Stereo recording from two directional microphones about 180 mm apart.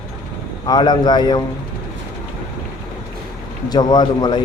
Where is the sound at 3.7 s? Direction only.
25° left (ahead or behind).